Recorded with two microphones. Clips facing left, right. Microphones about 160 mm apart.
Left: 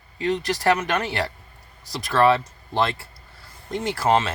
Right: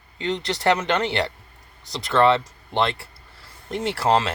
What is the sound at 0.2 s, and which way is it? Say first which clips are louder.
Speech: left 2 dB; 25° right (ahead or behind).